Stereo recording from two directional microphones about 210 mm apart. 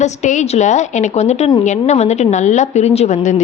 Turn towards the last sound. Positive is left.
turn(degrees=30)  # may be behind; listen again after turning